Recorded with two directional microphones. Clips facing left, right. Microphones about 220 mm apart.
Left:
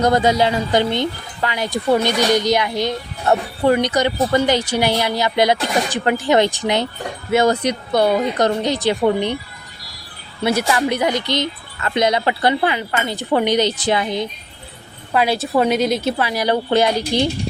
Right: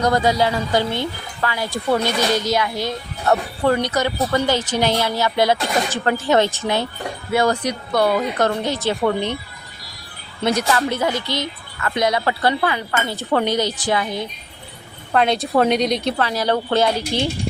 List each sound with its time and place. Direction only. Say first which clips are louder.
0.0 s speech: left 2 dB; 20° left (ahead or behind)
10.4 s speech: left 1 dB; 5° left (ahead or behind)
15.1 s speech: even; 5° left (ahead or behind)